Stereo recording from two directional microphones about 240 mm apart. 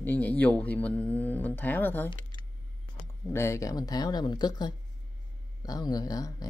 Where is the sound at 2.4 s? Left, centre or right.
Centre.